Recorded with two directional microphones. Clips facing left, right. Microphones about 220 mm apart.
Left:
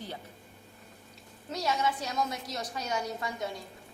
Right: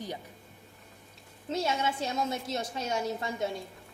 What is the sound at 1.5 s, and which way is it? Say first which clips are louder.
A woman's voice: right 1 dB; 25° right (ahead or behind).